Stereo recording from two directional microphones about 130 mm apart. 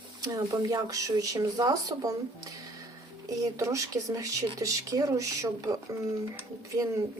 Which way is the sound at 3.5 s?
25° right (ahead or behind).